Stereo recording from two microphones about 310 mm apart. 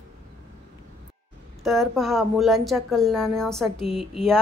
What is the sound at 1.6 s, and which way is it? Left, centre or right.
Speech, centre.